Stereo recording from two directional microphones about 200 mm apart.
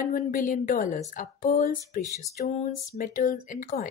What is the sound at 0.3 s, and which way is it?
A woman's voice, 40° left (ahead or behind).